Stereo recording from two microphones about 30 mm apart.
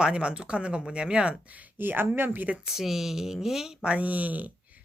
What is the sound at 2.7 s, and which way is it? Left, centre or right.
Speech, centre.